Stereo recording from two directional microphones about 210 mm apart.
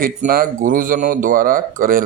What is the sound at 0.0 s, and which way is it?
Speech, 40° right (ahead or behind).